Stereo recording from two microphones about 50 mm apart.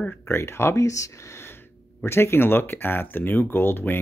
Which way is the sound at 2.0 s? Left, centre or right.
Left.